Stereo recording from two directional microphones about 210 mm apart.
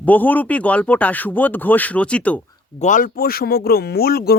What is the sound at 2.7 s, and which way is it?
Speech, 35° left (ahead or behind).